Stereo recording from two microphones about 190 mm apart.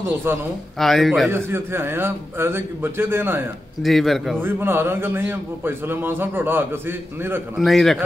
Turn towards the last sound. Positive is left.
turn(degrees=0)  # may be behind; listen again after turning